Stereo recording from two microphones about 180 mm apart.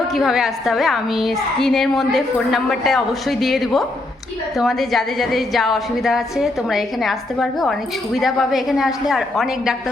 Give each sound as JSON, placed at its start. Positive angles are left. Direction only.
{"t": 0.1, "sound": "a woman's voice", "side_deg": 0}